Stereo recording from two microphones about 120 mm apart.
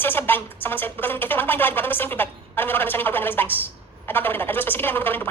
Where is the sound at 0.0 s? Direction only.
15° left (ahead or behind).